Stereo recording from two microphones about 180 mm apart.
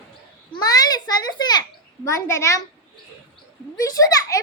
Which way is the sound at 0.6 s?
20° left (ahead or behind).